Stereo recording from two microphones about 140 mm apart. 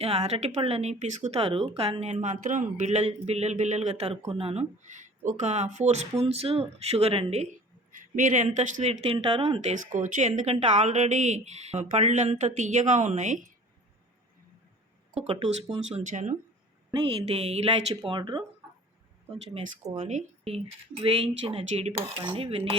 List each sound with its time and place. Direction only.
0.0 s speech: 45° right (ahead or behind)
4.8 s speech: 60° right (ahead or behind); by 7.4 s 45° right (ahead or behind)
8.1 s speech: 65° right (ahead or behind)
9.6 s speech: 65° right (ahead or behind)
15.1 s speech: 50° right (ahead or behind)
18.0 s speech: 35° right (ahead or behind)
20.0 s speech: 50° right (ahead or behind)